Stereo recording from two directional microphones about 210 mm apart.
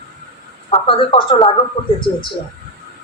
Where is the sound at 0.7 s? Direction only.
25° left (ahead or behind).